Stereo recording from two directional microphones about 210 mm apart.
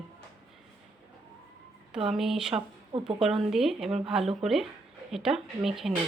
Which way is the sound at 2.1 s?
Centre (ahead or behind).